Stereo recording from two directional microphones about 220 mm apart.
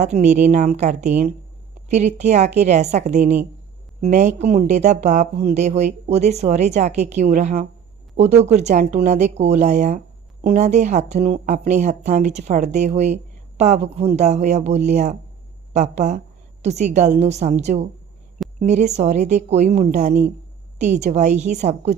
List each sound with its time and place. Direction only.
0.0 s speech: 30° right (ahead or behind)